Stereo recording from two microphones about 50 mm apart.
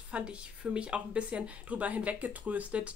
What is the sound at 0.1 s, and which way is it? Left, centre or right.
A woman's voice, right.